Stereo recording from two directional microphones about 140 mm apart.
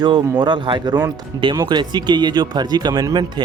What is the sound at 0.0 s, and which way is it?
Speech, 30° right (ahead or behind).